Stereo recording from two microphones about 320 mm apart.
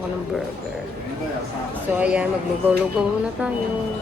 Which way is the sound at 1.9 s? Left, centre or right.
Centre.